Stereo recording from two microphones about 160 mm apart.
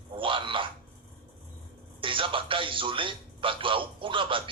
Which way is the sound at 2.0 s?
30° right (ahead or behind).